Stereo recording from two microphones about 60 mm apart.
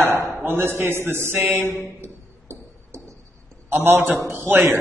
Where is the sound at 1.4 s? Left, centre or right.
Right.